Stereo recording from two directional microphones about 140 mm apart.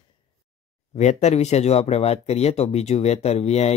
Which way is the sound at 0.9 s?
55° left (ahead or behind).